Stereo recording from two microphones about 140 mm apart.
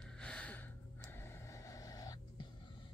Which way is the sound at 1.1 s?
20° left (ahead or behind).